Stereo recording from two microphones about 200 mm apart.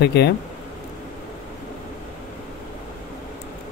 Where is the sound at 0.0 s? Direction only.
55° left (ahead or behind).